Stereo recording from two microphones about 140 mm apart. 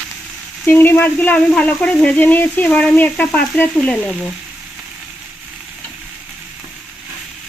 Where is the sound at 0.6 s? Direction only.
15° left (ahead or behind).